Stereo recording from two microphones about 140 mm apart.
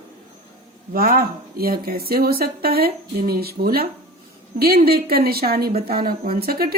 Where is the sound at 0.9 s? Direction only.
90° right.